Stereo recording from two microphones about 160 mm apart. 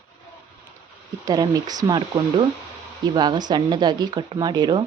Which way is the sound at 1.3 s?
25° right (ahead or behind).